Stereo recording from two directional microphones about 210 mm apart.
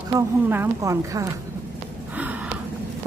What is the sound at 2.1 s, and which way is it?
Gasp, 5° right (ahead or behind).